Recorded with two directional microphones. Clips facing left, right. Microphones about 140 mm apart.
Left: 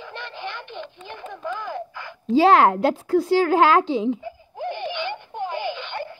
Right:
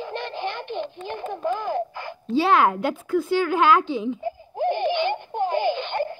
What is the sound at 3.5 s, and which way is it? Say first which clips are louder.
Speech: left 1 dB; 90° left.